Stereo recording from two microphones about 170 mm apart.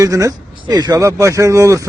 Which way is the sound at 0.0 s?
20° right (ahead or behind).